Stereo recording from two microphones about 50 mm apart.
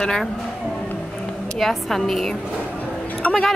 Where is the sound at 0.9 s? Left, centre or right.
Centre.